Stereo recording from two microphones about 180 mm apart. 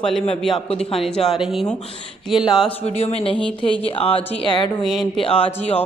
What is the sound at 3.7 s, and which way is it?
Speech, 30° left (ahead or behind).